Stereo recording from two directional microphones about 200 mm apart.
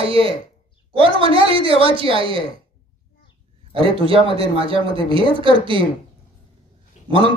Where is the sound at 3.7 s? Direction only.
25° right (ahead or behind).